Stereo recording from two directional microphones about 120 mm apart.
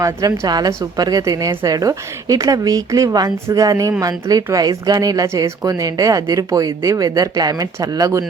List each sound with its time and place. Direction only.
0.0 s a woman's voice: 30° right (ahead or behind)